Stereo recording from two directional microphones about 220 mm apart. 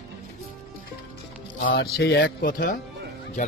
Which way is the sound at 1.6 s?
55° left (ahead or behind).